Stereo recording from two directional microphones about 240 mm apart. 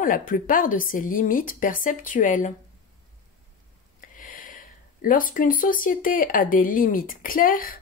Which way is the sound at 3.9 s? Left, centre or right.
Left.